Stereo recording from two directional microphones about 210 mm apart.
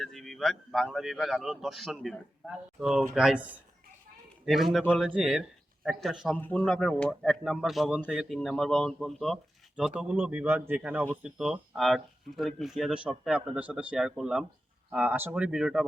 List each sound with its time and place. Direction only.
0.0 s speech: centre (ahead or behind)